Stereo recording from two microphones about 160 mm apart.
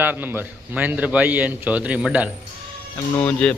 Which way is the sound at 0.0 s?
10° right (ahead or behind).